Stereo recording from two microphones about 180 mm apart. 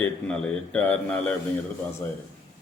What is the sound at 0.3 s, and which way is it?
A man's voice, 5° left (ahead or behind).